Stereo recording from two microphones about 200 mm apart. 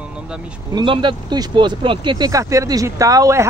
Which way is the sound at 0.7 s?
25° right (ahead or behind).